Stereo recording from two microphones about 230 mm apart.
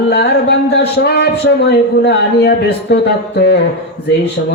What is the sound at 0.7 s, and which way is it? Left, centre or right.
Speech, left.